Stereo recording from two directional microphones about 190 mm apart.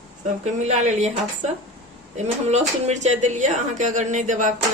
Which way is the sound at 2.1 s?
35° right (ahead or behind).